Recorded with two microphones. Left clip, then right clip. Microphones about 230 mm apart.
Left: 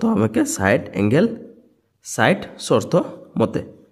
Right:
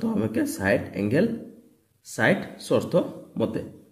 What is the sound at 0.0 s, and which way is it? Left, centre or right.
A man's voice, left.